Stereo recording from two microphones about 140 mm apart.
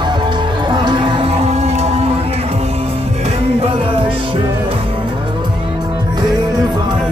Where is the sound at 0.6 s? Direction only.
35° right (ahead or behind); by 2.0 s 50° right (ahead or behind).